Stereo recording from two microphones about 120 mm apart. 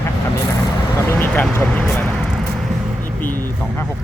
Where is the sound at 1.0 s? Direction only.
15° left (ahead or behind).